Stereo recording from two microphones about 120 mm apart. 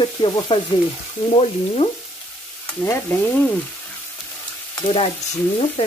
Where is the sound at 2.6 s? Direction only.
20° left (ahead or behind).